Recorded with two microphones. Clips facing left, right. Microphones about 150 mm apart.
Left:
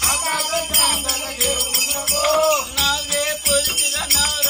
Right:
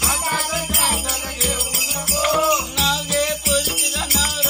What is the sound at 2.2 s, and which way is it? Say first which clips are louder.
Music: left 3 dB; 30° left (ahead or behind).